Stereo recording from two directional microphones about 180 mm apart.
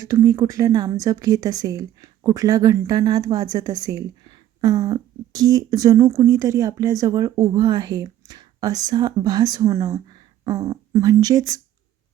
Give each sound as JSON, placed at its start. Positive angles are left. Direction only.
{"t": 0.0, "sound": "a woman's voice", "side_deg": -15}